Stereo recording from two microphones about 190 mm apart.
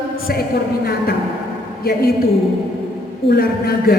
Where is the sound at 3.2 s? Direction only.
55° left (ahead or behind).